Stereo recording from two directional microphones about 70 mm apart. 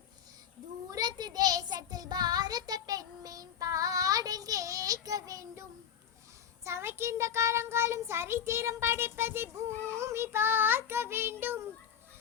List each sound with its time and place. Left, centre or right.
0.9 s a child's voice: right
6.7 s a child's voice: right